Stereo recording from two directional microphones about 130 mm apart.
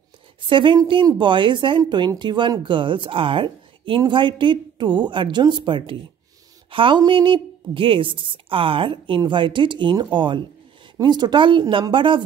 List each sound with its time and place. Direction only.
0.5 s a woman's voice: 40° right (ahead or behind)